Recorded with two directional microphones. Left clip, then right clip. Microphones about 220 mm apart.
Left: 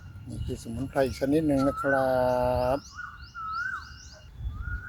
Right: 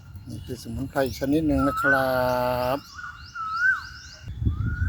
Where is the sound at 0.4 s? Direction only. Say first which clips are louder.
Right 1 dB; 5° right (ahead or behind).